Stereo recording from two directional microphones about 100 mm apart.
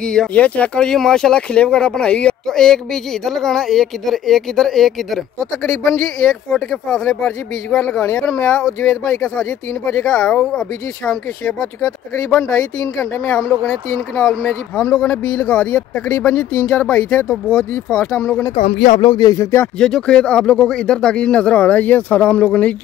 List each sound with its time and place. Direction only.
0.0 s speech: 5° left (ahead or behind)
19.0 s speech: 40° left (ahead or behind)
19.8 s speech: 10° left (ahead or behind)